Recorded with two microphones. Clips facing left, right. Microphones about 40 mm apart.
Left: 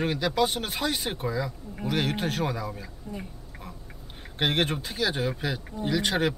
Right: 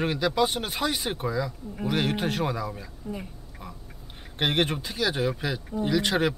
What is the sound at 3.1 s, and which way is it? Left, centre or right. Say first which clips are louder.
Speech: right 3 dB; centre.